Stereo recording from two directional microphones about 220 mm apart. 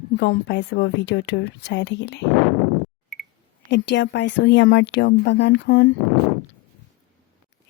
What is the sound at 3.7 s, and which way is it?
A woman's voice, 55° left (ahead or behind).